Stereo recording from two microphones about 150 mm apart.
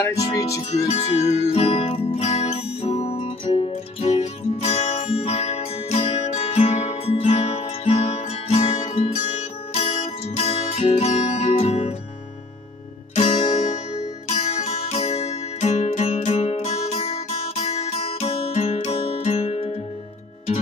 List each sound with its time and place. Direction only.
0.0 s music: 20° left (ahead or behind)
0.6 s music: 45° left (ahead or behind)
13.1 s music: 50° left (ahead or behind)